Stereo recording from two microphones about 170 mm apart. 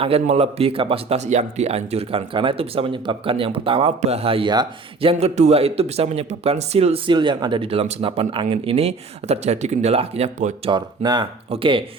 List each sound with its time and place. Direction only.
0.0 s speech: 35° right (ahead or behind)
10.7 s speech: 25° right (ahead or behind)